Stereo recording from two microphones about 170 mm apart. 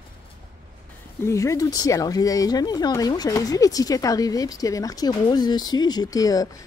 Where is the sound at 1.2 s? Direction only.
20° left (ahead or behind).